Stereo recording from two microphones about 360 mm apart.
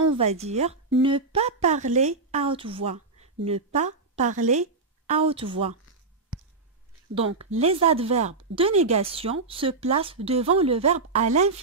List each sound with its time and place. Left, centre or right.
0.1 s a woman's voice: centre
7.2 s speech: centre